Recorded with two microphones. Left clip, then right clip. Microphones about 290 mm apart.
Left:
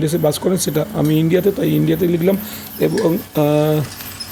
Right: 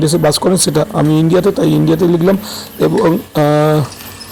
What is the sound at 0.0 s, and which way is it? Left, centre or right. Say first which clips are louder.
Speech: right 5 dB; centre.